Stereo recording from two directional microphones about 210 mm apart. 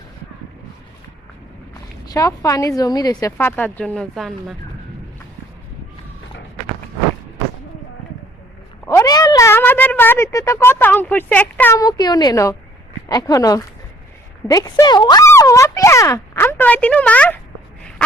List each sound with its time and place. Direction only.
2.0 s speech: 15° left (ahead or behind); by 4.5 s centre (ahead or behind)
8.9 s speech: 15° left (ahead or behind)